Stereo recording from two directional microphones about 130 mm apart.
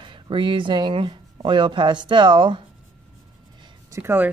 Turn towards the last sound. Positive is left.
turn(degrees=-20)  # may be behind; listen again after turning